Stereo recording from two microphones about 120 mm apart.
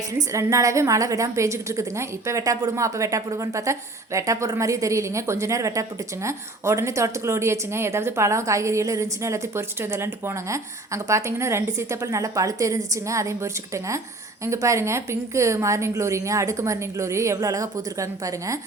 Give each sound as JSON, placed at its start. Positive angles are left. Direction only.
{"t": 0.1, "sound": "a woman's voice", "side_deg": -25}